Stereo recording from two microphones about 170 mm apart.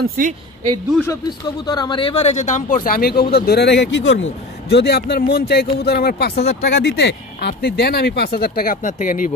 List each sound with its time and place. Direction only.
0.0 s a woman's voice: 60° right (ahead or behind)
1.0 s speech: 20° left (ahead or behind); by 5.0 s 80° left
5.1 s speech: 65° left (ahead or behind)